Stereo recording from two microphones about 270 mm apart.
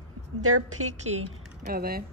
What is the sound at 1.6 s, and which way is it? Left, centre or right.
Speech, right.